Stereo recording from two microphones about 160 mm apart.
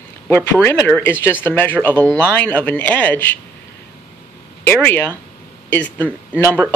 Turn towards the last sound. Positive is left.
turn(degrees=10)  # may be behind; listen again after turning